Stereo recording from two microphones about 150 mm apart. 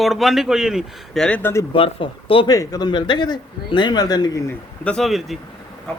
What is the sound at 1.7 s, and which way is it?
Speech, 35° left (ahead or behind).